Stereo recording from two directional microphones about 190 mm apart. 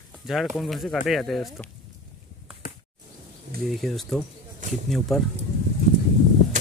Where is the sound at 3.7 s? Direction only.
Centre (ahead or behind).